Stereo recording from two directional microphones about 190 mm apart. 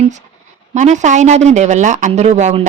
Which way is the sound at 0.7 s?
40° right (ahead or behind).